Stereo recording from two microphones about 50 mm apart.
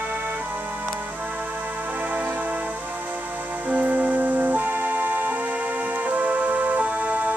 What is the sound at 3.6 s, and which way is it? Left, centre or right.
Music, right.